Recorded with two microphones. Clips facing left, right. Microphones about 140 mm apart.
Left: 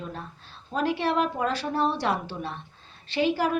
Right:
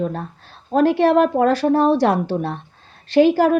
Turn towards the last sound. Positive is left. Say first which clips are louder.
# right 11 dB
turn(degrees=-45)  # may be behind; listen again after turning